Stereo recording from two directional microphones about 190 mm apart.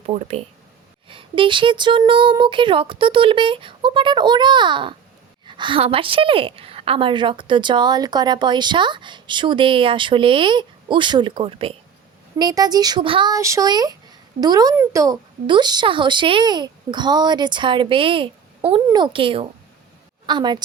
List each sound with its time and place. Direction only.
0.0 s a woman's voice: 35° right (ahead or behind)